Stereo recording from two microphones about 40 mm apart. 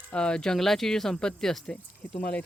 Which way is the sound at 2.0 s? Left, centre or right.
Left.